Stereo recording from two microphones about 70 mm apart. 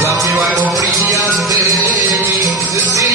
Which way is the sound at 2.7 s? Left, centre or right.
Right.